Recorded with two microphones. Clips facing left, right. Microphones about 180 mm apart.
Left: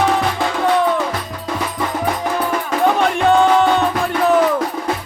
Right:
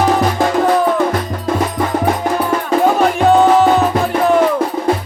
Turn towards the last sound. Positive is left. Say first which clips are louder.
# right 3 dB
turn(degrees=-5)  # may be behind; listen again after turning